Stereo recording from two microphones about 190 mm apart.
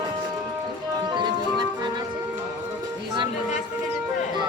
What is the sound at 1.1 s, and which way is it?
Music, 25° right (ahead or behind).